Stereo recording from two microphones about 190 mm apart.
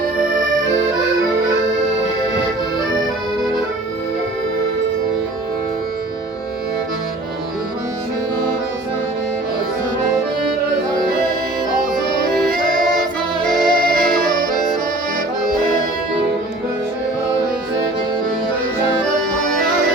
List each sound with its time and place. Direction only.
12.3 s music: centre (ahead or behind)
14.3 s accordion: 45° right (ahead or behind)